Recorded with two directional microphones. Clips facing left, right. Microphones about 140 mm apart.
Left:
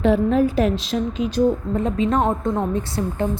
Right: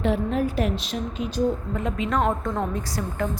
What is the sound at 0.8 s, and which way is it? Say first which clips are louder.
Speech: left 6 dB; 90° left.